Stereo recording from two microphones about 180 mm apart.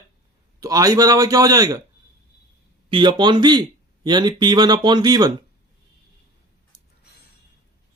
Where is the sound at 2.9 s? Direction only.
25° right (ahead or behind).